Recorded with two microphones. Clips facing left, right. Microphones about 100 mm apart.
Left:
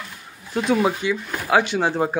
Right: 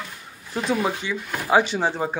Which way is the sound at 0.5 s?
Centre (ahead or behind).